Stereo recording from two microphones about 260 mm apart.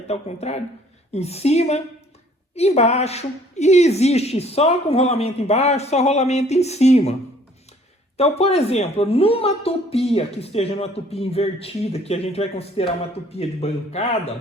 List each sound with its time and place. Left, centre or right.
0.1 s speech: left
8.2 s speech: left